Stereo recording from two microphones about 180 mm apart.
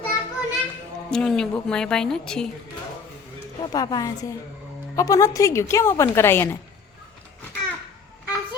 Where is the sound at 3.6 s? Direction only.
20° left (ahead or behind).